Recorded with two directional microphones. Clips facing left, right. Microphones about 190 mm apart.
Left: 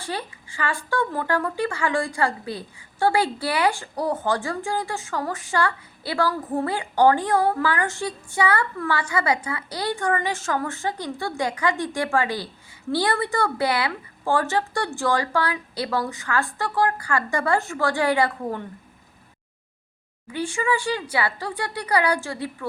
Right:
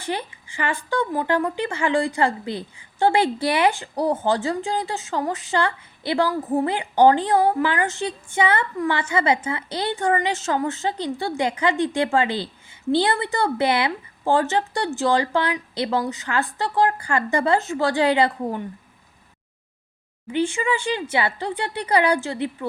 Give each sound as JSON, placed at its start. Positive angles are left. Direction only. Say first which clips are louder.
{"t": 0.0, "sound": "speech", "louder": "right 3 dB", "side_deg": -20}
{"t": 20.3, "sound": "speech", "louder": "right 2 dB", "side_deg": -25}